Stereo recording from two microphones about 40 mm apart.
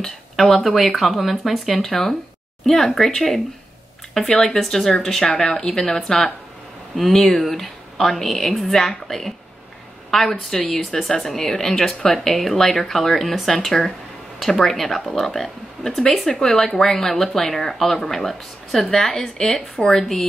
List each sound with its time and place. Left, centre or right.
0.0 s a woman's voice: centre